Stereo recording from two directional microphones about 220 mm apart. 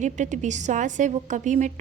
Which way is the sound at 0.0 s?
35° right (ahead or behind).